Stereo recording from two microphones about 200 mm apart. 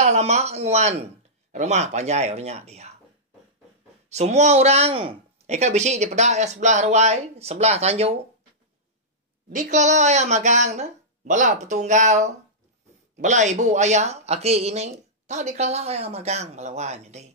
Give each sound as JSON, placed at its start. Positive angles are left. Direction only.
{"t": 0.0, "sound": "speech", "side_deg": -35}
{"t": 4.1, "sound": "speech", "side_deg": -35}
{"t": 9.5, "sound": "speech", "side_deg": -40}